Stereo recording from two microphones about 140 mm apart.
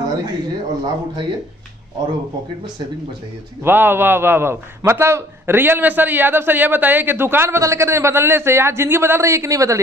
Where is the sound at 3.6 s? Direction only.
15° right (ahead or behind).